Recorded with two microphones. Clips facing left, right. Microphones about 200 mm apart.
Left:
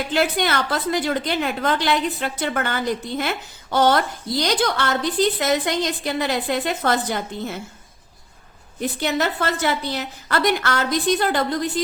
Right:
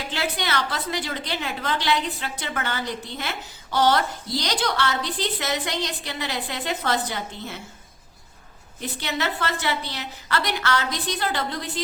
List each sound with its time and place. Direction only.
0.1 s a woman's voice: 50° left (ahead or behind)
9.0 s a woman's voice: 45° left (ahead or behind)